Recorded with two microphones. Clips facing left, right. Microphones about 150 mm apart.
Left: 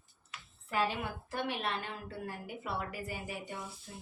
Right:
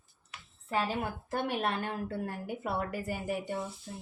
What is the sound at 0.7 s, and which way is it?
A woman's voice, 40° right (ahead or behind).